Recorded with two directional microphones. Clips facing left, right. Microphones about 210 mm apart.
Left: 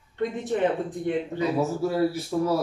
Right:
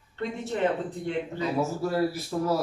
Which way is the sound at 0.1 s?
15° left (ahead or behind).